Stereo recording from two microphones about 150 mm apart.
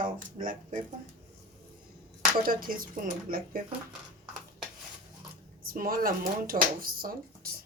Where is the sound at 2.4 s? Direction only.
70° right (ahead or behind).